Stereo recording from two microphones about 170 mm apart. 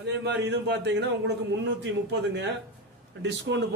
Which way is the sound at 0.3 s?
90° right.